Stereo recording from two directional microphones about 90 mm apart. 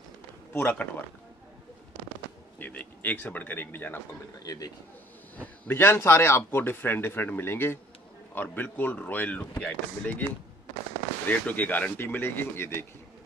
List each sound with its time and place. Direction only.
0.5 s speech: 15° left (ahead or behind)
2.6 s speech: 20° left (ahead or behind)
4.4 s a man's voice: 45° left (ahead or behind)
5.4 s speech: 25° left (ahead or behind)
11.2 s speech: 15° left (ahead or behind)